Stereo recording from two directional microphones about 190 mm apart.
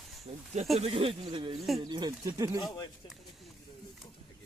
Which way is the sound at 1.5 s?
Centre (ahead or behind).